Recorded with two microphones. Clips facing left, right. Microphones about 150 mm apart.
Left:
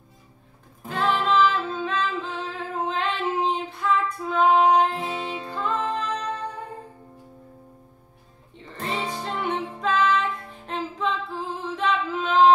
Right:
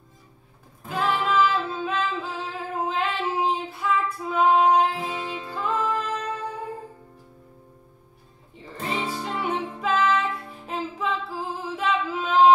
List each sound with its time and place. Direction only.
0.8 s music: 10° right (ahead or behind)
2.5 s female singing: 5° right (ahead or behind)
5.2 s music: 25° left (ahead or behind)
5.5 s music: 10° right (ahead or behind)
8.6 s music: 5° right (ahead or behind)
10.7 s singing: 10° right (ahead or behind)